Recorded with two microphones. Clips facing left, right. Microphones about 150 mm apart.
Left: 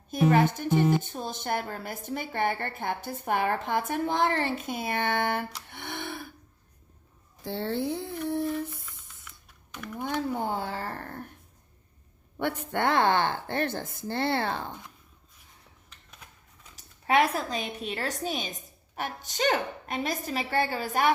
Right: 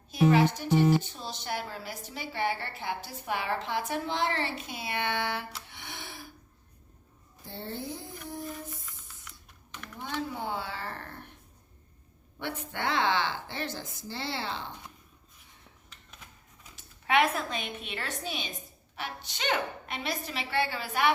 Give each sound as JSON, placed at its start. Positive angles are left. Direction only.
{"t": 0.1, "sound": "speech", "side_deg": 50}
{"t": 5.6, "sound": "gasp", "side_deg": 55}
{"t": 7.4, "sound": "a sound", "side_deg": 85}
{"t": 10.2, "sound": "speech", "side_deg": 50}
{"t": 12.4, "sound": "speech", "side_deg": 55}
{"t": 16.7, "sound": "a woman's voice", "side_deg": 40}